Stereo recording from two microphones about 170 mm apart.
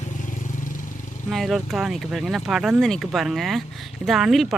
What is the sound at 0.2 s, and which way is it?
Vehicle, 50° left (ahead or behind).